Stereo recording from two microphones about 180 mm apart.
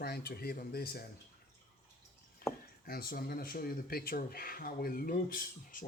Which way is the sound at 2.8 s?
55° left (ahead or behind).